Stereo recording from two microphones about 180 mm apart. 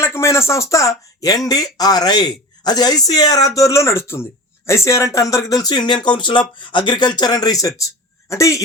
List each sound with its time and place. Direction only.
0.0 s speech: 15° left (ahead or behind)